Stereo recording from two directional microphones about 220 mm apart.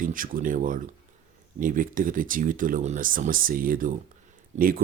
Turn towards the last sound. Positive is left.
turn(degrees=-40)  # may be behind; listen again after turning